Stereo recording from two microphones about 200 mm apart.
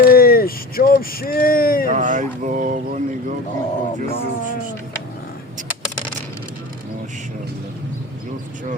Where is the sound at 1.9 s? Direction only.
40° right (ahead or behind).